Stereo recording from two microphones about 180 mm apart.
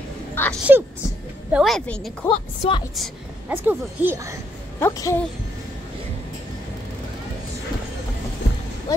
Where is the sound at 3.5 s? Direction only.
10° right (ahead or behind).